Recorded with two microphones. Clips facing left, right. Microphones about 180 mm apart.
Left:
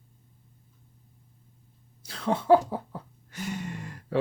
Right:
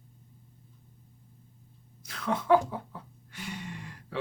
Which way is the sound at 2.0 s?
30° left (ahead or behind).